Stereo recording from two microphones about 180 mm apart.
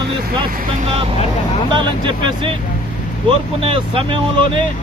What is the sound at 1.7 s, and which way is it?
Speech, 25° right (ahead or behind).